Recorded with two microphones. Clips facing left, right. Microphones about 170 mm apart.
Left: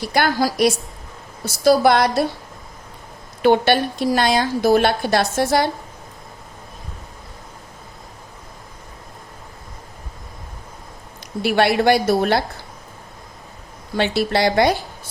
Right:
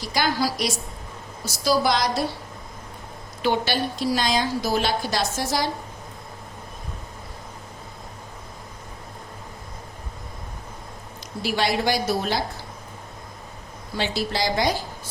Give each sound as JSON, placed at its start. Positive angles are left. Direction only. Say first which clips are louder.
{"t": 0.0, "sound": "a woman's voice", "louder": "left 5 dB", "side_deg": 60}
{"t": 3.4, "sound": "a woman's voice", "louder": "left 8 dB", "side_deg": 55}
{"t": 11.4, "sound": "a woman's voice", "louder": "left 7 dB", "side_deg": 60}
{"t": 13.9, "sound": "a woman's voice", "louder": "left 7 dB", "side_deg": 60}